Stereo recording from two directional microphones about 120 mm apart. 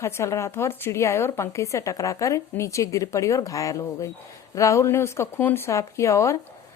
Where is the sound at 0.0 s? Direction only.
20° left (ahead or behind).